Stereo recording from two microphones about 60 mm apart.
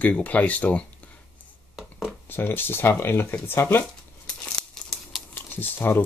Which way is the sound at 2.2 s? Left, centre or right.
Left.